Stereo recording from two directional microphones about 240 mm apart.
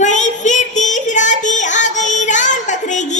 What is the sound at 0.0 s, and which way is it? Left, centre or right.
Child singing, left.